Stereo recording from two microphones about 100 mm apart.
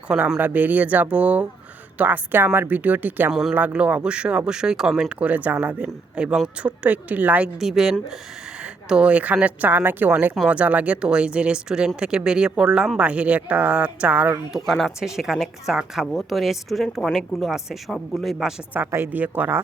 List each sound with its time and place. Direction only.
0.1 s speech: 5° right (ahead or behind)
0.3 s speech: 15° right (ahead or behind)
14.7 s speech: centre (ahead or behind)
18.9 s a woman's voice: 25° right (ahead or behind)